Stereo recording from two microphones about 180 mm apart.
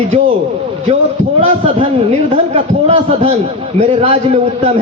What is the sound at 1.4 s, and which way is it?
A man's voice, 35° right (ahead or behind).